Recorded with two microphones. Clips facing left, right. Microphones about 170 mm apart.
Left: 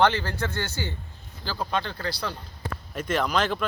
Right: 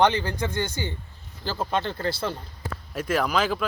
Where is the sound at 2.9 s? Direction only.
5° right (ahead or behind).